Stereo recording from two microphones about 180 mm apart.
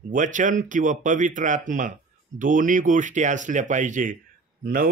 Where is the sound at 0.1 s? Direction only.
45° right (ahead or behind).